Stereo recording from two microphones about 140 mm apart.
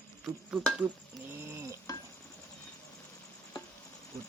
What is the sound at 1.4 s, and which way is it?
Dishes, 20° right (ahead or behind).